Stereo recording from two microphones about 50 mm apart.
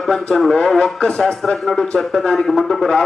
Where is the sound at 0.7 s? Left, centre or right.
Centre.